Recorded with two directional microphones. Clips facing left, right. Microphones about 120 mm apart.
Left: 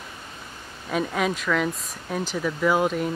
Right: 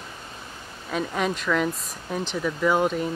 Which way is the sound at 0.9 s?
5° left (ahead or behind).